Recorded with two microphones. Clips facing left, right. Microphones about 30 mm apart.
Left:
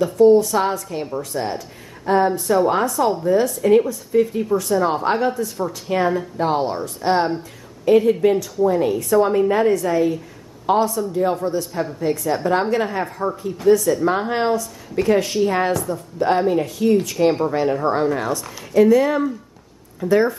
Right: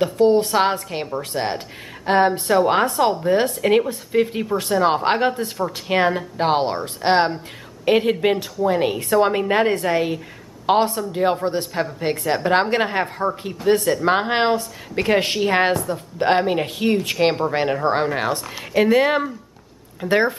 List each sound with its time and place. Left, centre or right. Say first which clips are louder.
0.0 s a woman's voice: left 3 dB; right